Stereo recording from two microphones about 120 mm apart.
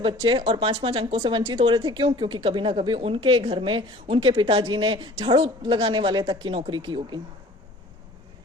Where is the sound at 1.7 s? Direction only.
40° right (ahead or behind).